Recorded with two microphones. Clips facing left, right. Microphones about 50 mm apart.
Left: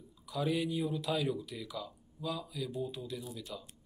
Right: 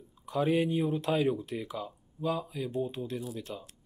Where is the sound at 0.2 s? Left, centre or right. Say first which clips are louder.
Right 6 dB; right.